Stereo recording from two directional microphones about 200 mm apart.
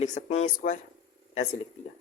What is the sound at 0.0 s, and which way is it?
Speech, 35° left (ahead or behind).